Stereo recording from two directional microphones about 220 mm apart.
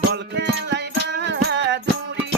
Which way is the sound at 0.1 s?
50° right (ahead or behind).